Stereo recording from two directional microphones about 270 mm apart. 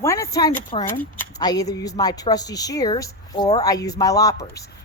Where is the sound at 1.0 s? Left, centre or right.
Centre.